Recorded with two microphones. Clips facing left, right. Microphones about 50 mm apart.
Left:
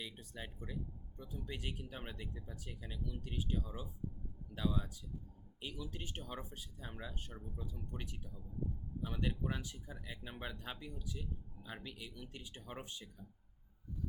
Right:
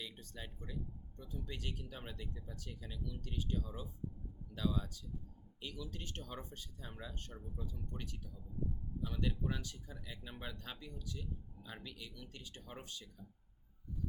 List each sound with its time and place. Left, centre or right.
0.0 s speech: centre